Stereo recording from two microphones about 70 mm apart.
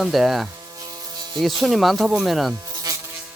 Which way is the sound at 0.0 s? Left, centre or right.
Centre.